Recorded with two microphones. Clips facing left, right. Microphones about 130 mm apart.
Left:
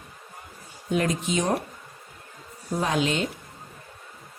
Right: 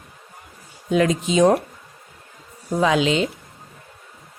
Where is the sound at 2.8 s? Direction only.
90° right.